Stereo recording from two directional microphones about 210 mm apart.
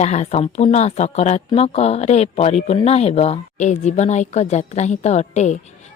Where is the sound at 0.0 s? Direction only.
35° left (ahead or behind).